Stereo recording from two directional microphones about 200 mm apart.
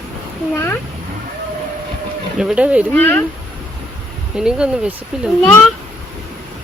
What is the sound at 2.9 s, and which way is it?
Speech, 10° left (ahead or behind).